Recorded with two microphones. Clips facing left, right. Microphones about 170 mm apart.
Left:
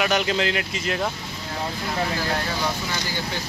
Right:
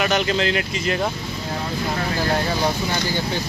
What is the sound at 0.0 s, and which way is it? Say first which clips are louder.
Speech: right 2 dB; 5° left (ahead or behind).